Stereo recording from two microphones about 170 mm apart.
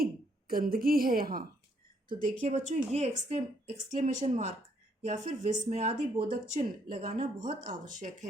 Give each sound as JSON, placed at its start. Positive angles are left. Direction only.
{"t": 0.0, "sound": "a woman's voice", "side_deg": -60}
{"t": 2.4, "sound": "speech", "side_deg": -45}